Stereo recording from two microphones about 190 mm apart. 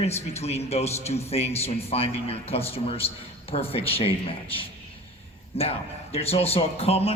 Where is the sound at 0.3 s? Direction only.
35° left (ahead or behind).